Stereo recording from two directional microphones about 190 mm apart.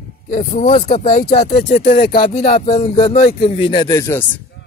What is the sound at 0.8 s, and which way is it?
Speech, 50° left (ahead or behind).